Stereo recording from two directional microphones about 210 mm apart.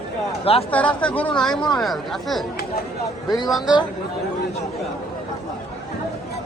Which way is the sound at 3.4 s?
Centre (ahead or behind).